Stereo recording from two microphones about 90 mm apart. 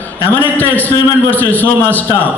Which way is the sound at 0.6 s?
20° left (ahead or behind).